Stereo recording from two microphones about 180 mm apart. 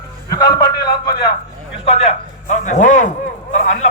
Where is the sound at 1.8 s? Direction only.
35° left (ahead or behind).